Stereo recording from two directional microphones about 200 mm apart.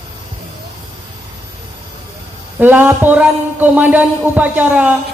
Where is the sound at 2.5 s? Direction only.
10° right (ahead or behind).